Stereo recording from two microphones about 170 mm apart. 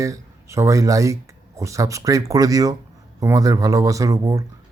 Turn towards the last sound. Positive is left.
turn(degrees=-20)  # may be behind; listen again after turning